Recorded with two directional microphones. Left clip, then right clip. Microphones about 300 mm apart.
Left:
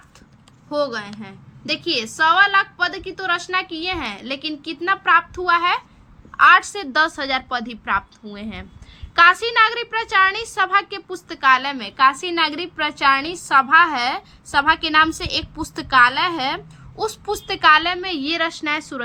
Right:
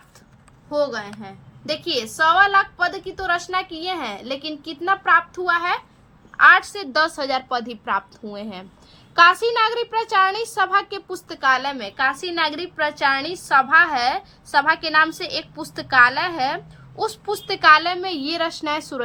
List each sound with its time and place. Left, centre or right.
0.7 s a woman's voice: centre
17.1 s a child's voice: left
17.6 s a woman's voice: centre